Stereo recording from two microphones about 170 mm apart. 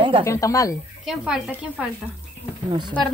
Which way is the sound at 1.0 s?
5° right (ahead or behind).